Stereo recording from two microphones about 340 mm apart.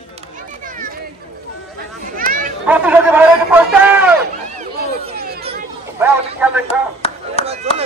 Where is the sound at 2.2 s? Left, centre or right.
Right.